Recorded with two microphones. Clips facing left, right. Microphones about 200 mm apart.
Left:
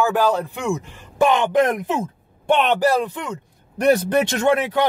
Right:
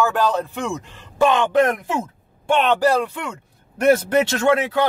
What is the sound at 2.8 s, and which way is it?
Speech, 15° left (ahead or behind).